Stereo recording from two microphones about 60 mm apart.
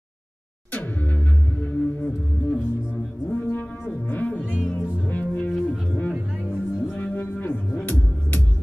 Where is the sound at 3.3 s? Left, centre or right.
Left.